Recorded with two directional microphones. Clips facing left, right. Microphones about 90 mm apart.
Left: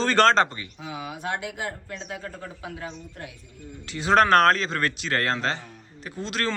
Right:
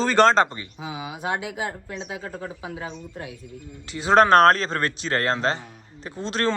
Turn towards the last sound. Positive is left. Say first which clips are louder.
# right 4 dB
turn(degrees=-30)  # may be behind; listen again after turning